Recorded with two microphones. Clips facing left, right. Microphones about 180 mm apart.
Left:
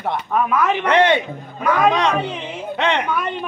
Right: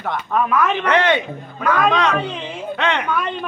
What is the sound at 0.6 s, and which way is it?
A woman's voice, 15° left (ahead or behind).